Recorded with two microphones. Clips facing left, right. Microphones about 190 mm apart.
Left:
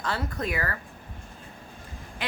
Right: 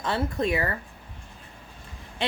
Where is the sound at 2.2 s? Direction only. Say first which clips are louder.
Right 5 dB; 25° right (ahead or behind).